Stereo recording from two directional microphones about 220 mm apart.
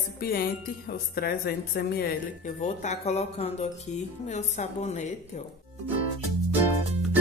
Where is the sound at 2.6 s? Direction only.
30° left (ahead or behind).